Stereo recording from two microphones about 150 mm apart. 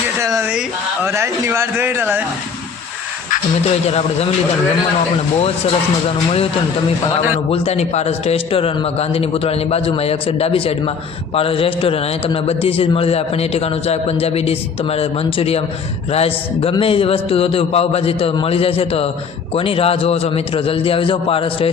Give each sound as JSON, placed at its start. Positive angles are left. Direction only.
{"t": 0.2, "sound": "a sound", "side_deg": -20}
{"t": 1.0, "sound": "a man's voice", "side_deg": -15}
{"t": 3.6, "sound": "speech", "side_deg": 45}
{"t": 7.5, "sound": "a man's voice", "side_deg": 45}